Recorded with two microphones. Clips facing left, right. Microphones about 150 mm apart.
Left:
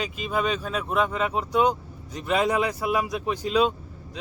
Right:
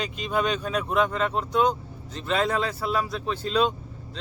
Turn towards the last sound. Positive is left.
turn(degrees=10)  # may be behind; listen again after turning